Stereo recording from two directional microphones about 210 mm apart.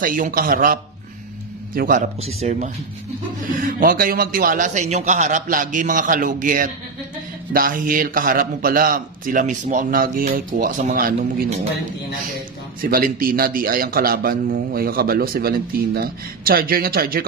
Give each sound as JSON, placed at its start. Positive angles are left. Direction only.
{"t": 0.0, "sound": "a man's voice", "side_deg": -40}
{"t": 1.8, "sound": "a man's voice", "side_deg": -40}
{"t": 12.8, "sound": "a man's voice", "side_deg": -45}